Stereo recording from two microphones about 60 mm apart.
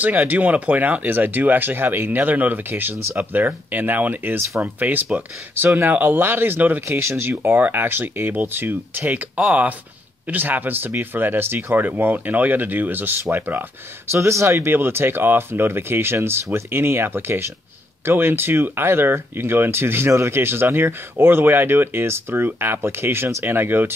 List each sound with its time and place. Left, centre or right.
0.2 s speech: right
14.1 s speech: right
14.7 s speech: right